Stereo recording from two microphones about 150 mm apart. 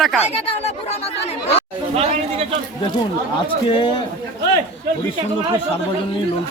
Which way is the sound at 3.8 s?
30° left (ahead or behind).